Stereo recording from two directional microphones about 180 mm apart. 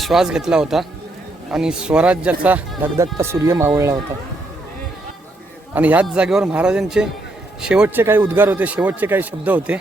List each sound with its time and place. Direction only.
0.0 s a man's voice: centre (ahead or behind)
5.7 s a man's voice: 10° right (ahead or behind)